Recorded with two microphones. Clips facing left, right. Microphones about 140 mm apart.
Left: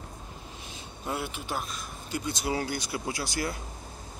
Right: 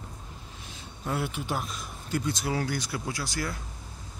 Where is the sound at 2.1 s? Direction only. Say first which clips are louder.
Right 1 dB; 15° left (ahead or behind).